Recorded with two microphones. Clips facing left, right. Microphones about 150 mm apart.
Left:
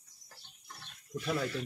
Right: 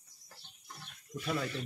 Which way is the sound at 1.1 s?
Centre (ahead or behind).